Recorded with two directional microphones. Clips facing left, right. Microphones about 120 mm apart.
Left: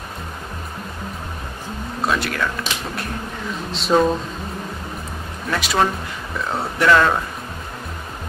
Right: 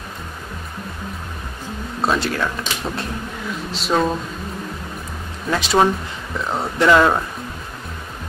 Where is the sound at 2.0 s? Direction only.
25° right (ahead or behind).